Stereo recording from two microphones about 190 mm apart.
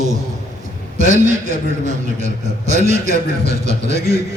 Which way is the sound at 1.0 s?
40° right (ahead or behind).